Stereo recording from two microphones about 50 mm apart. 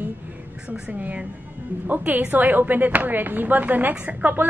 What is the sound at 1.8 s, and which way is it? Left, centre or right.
Speech, right.